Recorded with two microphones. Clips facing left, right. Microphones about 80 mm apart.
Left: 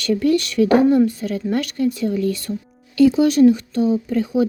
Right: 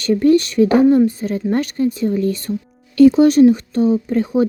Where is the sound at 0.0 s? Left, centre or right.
Right.